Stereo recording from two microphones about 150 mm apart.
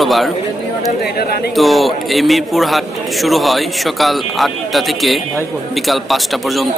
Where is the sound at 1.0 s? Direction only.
90° left.